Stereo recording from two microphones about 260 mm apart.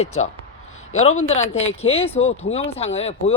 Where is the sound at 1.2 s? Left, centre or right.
Left.